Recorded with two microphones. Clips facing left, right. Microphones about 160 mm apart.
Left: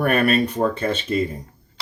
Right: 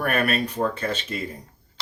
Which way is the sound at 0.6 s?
30° left (ahead or behind).